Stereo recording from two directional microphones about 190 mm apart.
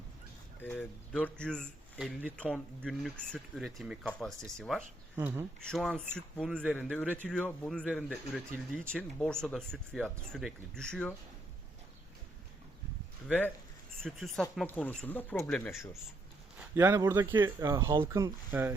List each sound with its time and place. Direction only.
0.6 s speech: 10° left (ahead or behind)
5.1 s speech: 15° right (ahead or behind)
5.6 s speech: centre (ahead or behind)
13.2 s speech: 10° left (ahead or behind)
16.7 s speech: 15° right (ahead or behind)